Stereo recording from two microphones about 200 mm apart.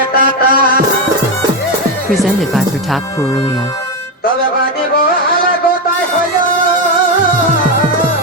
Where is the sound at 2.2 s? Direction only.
Centre (ahead or behind).